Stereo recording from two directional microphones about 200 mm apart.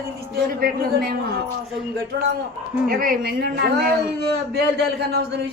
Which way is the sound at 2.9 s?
45° right (ahead or behind).